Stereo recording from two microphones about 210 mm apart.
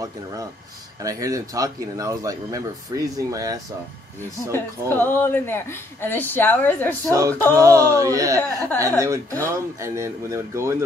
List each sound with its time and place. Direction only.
1.0 s a man's voice: 15° right (ahead or behind)
4.5 s a woman's voice: 10° left (ahead or behind)
7.1 s a man's voice: 15° right (ahead or behind)